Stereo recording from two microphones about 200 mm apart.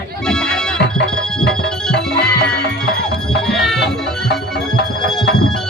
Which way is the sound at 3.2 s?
5° left (ahead or behind).